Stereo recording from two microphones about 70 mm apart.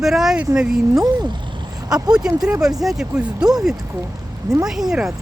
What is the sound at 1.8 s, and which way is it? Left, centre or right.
Speech, right.